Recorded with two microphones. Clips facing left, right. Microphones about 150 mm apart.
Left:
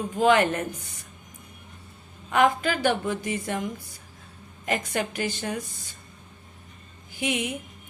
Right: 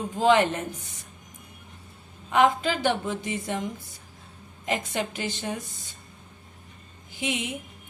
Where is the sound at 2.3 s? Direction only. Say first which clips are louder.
Even; 20° right (ahead or behind).